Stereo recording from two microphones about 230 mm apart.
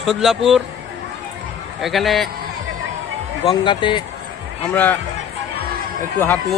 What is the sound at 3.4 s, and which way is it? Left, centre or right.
Speech, centre.